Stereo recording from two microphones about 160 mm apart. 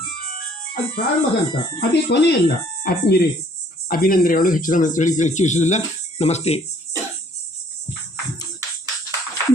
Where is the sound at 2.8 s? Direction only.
75° left (ahead or behind).